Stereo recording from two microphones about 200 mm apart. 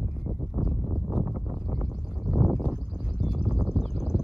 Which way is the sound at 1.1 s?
15° right (ahead or behind).